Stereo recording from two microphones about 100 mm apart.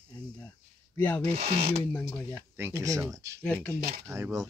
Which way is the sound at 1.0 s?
20° left (ahead or behind).